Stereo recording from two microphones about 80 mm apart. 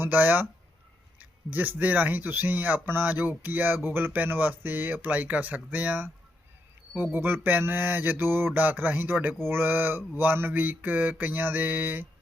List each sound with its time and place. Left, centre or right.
0.0 s mantra: right